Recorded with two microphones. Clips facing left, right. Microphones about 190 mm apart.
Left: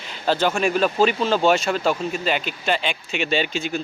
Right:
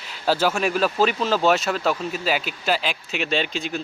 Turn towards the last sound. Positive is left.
turn(degrees=0)  # may be behind; listen again after turning